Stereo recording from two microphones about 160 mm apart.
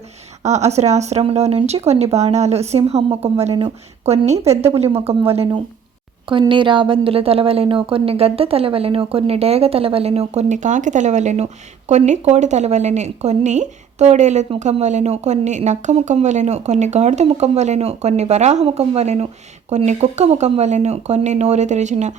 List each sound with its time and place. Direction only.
0.4 s a woman's voice: 45° right (ahead or behind)